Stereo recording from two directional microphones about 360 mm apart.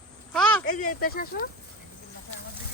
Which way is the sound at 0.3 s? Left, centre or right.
Centre.